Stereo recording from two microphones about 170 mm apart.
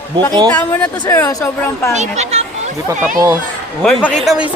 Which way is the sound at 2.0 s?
40° right (ahead or behind).